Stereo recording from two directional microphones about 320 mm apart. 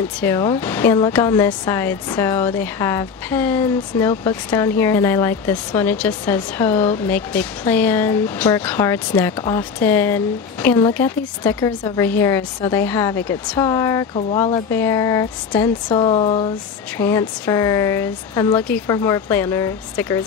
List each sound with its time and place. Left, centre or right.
0.2 s speech: centre